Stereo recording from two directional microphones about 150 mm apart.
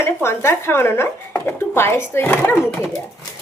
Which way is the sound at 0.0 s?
15° left (ahead or behind).